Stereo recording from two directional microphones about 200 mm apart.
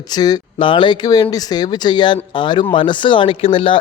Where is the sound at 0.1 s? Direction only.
20° left (ahead or behind).